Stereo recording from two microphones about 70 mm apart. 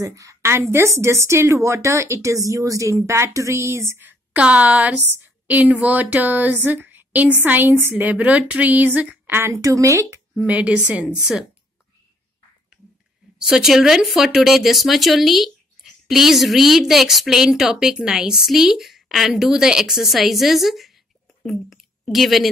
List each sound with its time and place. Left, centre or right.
0.0 s speech: right
4.0 s a woman's voice: right
8.0 s a woman's voice: right
9.6 s speech: right
10.4 s a woman's voice: right
11.1 s speech: centre
13.4 s a woman's voice: centre